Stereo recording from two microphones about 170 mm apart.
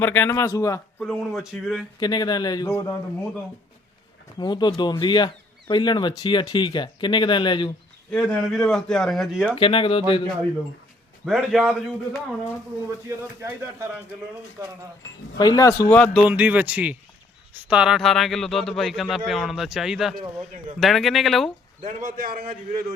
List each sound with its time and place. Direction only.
0.0 s speech: 10° left (ahead or behind)
1.0 s speech: centre (ahead or behind)
2.0 s speech: 25° left (ahead or behind)
4.4 s speech: 25° left (ahead or behind)
8.1 s speech: 5° left (ahead or behind)
9.6 s speech: 30° left (ahead or behind)
11.3 s speech: 5° right (ahead or behind)
13.1 s speech: 15° right (ahead or behind)
15.4 s speech: 20° left (ahead or behind)
16.3 s speech: 10° right (ahead or behind)
21.8 s a man's voice: 50° right (ahead or behind)